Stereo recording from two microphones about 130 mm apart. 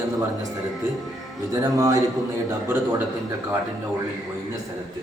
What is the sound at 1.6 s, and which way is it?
A man's voice, 25° right (ahead or behind).